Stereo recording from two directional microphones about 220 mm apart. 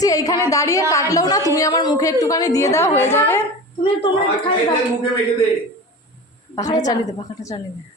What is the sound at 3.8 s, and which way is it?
Speech, 25° left (ahead or behind).